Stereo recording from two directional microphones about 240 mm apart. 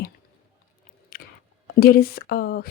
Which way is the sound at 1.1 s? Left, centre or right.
Left.